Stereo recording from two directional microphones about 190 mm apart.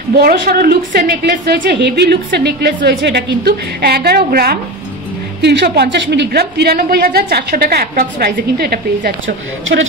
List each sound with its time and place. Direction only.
0.2 s a woman's voice: 55° right (ahead or behind)